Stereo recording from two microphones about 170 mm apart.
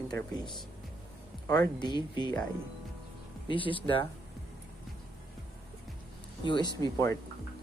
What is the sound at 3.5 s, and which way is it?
Speech, 30° left (ahead or behind).